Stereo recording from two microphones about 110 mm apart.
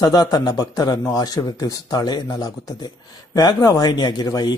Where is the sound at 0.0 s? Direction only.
35° left (ahead or behind).